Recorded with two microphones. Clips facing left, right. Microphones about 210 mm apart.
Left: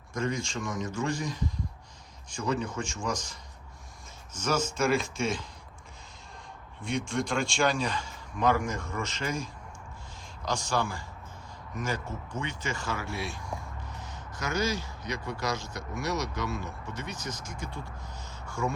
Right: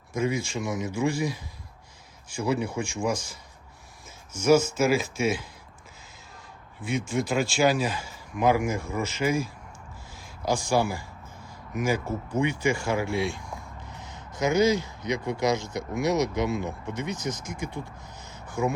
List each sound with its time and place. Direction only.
0.1 s a man's voice: 5° right (ahead or behind)
4.4 s a man's voice: 10° right (ahead or behind)
6.8 s a man's voice: 5° right (ahead or behind)
18.4 s a sound: 20° right (ahead or behind)